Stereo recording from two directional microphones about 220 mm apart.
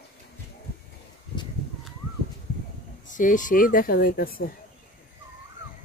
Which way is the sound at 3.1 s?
35° left (ahead or behind).